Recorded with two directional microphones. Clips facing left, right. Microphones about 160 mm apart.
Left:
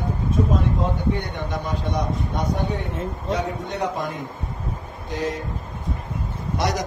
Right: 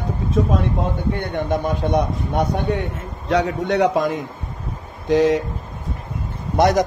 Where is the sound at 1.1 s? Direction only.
50° right (ahead or behind).